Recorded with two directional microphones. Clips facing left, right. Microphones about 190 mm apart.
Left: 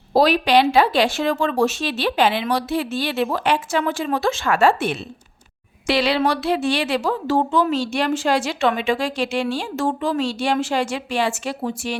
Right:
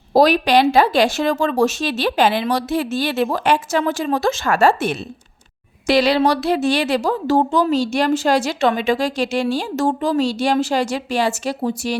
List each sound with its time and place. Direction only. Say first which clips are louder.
0.1 s a woman's voice: right 2 dB; 45° right (ahead or behind)